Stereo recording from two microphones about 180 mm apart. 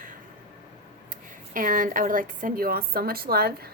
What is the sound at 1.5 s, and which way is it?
A woman's voice, 50° right (ahead or behind).